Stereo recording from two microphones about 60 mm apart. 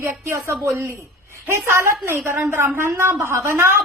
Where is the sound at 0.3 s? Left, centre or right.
Right.